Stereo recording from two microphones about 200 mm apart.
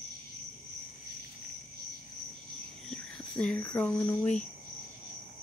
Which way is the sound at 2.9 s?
5° left (ahead or behind).